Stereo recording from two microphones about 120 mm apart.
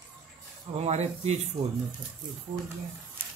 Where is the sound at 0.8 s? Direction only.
65° right (ahead or behind).